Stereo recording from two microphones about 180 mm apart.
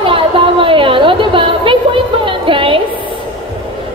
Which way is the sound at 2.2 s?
30° right (ahead or behind).